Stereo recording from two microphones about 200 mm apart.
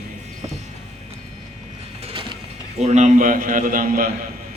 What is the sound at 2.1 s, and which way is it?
Music, 25° right (ahead or behind).